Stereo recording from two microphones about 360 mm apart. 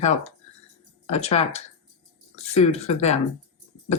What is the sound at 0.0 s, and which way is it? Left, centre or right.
A woman's voice, centre.